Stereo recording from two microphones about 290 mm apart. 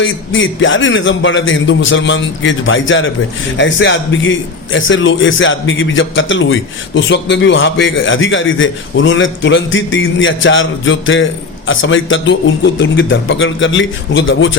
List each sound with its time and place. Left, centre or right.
0.0 s a man's voice: left